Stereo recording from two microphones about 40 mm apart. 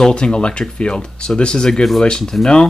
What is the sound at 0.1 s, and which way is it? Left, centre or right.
Speech, left.